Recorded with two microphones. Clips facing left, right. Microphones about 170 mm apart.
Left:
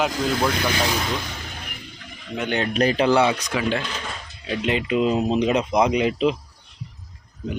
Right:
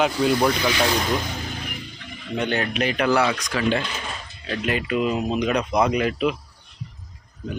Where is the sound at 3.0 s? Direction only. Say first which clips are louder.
Even; 20° left (ahead or behind).